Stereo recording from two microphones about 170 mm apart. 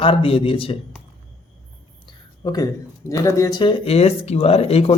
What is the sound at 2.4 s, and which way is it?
Speech, 25° left (ahead or behind).